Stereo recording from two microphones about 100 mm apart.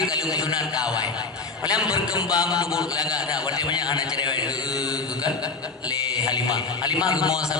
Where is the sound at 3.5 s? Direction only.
45° left (ahead or behind).